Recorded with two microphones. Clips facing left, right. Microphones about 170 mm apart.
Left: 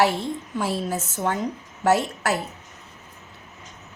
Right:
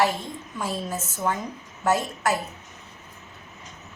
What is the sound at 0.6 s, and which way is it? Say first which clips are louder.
A woman's voice: left 3 dB; 70° left (ahead or behind).